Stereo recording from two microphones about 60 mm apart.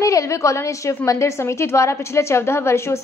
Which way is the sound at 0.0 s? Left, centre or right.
Left.